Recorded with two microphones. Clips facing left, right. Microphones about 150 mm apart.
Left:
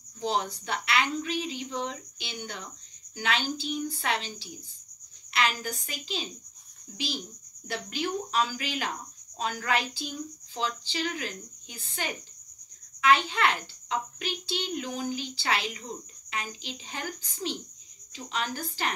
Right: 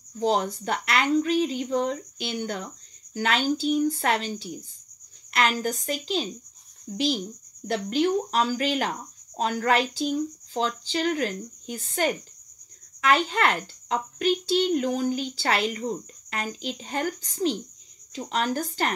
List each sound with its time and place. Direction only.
0.2 s a child's voice: 45° right (ahead or behind)
8.4 s a child's voice: 40° right (ahead or behind)